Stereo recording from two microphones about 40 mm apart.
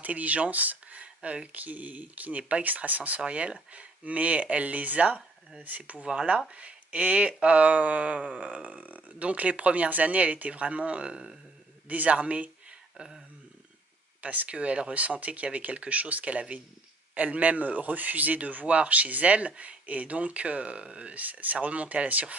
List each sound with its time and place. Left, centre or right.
0.0 s speech: right
1.5 s speech: right
3.2 s speech: right
3.7 s speech: right
11.9 s speech: right
12.9 s speech: centre
14.2 s speech: right
21.1 s speech: right